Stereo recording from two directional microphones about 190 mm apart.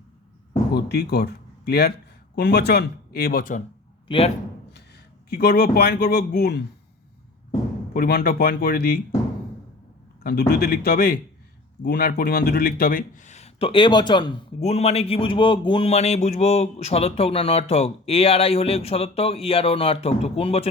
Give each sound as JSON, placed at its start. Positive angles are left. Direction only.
{"t": 0.7, "sound": "speech", "side_deg": 60}
{"t": 4.1, "sound": "a man's voice", "side_deg": 25}
{"t": 5.3, "sound": "speech", "side_deg": 55}
{"t": 7.9, "sound": "speech", "side_deg": 55}
{"t": 10.2, "sound": "speech", "side_deg": 55}